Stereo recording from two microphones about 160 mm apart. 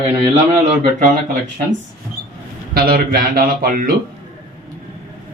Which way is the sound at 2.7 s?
70° right (ahead or behind).